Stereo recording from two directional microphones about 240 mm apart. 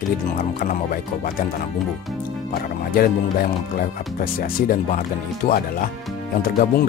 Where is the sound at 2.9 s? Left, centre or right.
Left.